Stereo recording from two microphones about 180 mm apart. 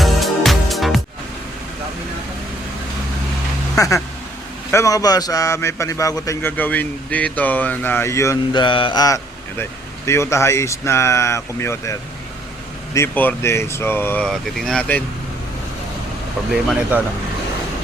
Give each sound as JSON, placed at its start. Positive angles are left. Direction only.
{"t": 0.0, "sound": "music", "side_deg": 0}
{"t": 3.8, "sound": "a man's voice", "side_deg": 15}
{"t": 8.6, "sound": "a man's voice", "side_deg": 25}